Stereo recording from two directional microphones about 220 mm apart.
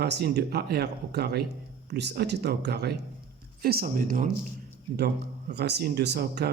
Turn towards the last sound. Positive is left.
turn(degrees=-50)  # may be behind; listen again after turning